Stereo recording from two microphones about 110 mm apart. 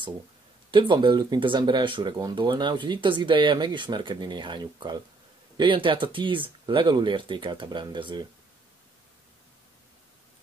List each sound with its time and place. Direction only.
0.7 s speech: 45° right (ahead or behind)